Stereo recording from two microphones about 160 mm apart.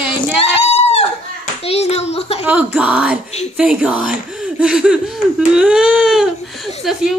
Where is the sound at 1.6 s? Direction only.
40° left (ahead or behind).